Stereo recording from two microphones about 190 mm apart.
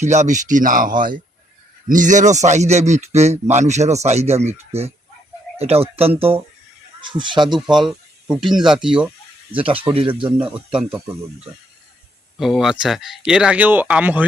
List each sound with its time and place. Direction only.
0.0 s speech: 40° right (ahead or behind)
7.5 s speech: centre (ahead or behind)
9.6 s speech: 30° right (ahead or behind)
10.2 s speech: 5° right (ahead or behind)
12.4 s speech: centre (ahead or behind)